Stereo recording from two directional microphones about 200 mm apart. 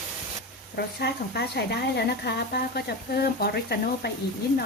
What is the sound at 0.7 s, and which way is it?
Speech, 55° left (ahead or behind).